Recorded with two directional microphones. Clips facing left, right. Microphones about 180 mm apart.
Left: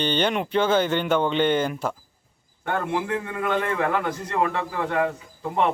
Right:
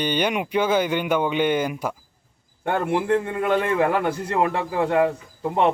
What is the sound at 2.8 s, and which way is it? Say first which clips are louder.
A man's voice: right 5 dB; 30° right (ahead or behind).